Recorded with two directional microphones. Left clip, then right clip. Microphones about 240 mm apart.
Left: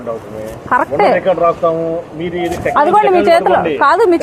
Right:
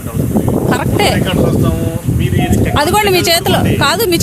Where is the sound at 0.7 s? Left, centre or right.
Right.